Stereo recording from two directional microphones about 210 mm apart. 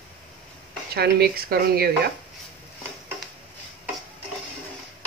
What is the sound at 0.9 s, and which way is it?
Speech, 45° right (ahead or behind).